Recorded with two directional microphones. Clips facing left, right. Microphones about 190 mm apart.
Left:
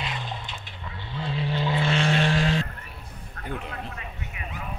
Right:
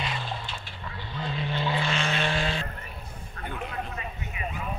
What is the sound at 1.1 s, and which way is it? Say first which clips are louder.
Vehicle: left 3 dB; 30° left (ahead or behind).